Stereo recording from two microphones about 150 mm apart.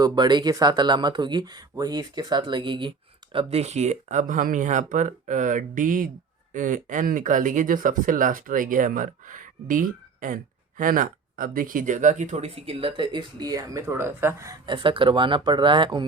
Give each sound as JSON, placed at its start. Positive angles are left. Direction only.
{"t": 0.0, "sound": "speech", "side_deg": -30}
{"t": 3.3, "sound": "speech", "side_deg": -45}
{"t": 14.7, "sound": "speech", "side_deg": -35}